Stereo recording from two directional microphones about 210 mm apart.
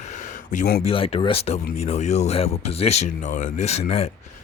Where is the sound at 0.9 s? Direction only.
25° left (ahead or behind).